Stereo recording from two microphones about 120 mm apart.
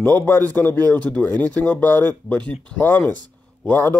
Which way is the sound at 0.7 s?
30° right (ahead or behind).